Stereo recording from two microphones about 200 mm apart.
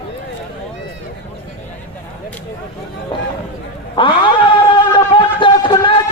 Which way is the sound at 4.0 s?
25° left (ahead or behind).